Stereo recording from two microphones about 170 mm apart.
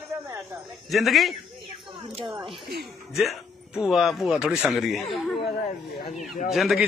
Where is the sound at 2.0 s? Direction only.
35° right (ahead or behind).